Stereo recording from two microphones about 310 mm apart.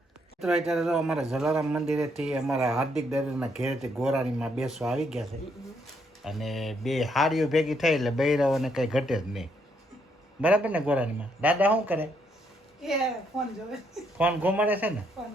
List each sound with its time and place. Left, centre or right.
0.4 s speech: centre
6.2 s a woman's voice: centre
14.2 s speech: centre